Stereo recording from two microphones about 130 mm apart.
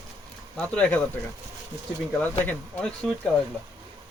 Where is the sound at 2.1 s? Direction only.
15° left (ahead or behind).